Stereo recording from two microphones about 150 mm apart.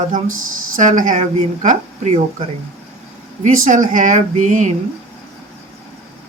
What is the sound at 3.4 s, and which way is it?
A woman's voice, 60° right (ahead or behind).